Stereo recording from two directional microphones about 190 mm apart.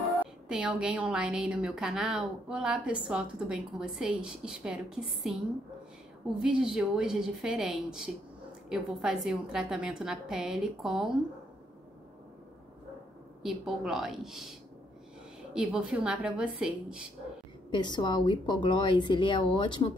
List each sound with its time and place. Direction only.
0.0 s a woman's voice: 5° right (ahead or behind)
13.4 s a woman's voice: centre (ahead or behind)
15.5 s a woman's voice: 5° right (ahead or behind)
17.6 s a woman's voice: 25° left (ahead or behind)